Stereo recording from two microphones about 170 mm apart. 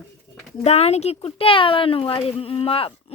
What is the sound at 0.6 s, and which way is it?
Speech, 40° left (ahead or behind).